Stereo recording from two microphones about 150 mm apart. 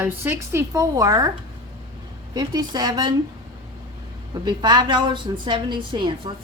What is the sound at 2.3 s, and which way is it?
Speech, 25° right (ahead or behind).